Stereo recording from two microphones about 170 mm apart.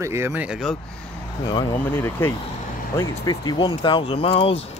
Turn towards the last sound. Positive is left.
turn(degrees=35)  # may be behind; listen again after turning